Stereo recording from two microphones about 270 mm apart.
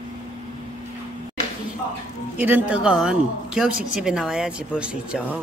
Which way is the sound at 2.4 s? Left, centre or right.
Centre.